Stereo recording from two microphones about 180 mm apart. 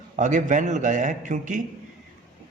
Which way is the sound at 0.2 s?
45° right (ahead or behind).